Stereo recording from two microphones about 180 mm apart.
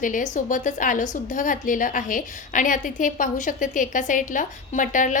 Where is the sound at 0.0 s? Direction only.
45° left (ahead or behind).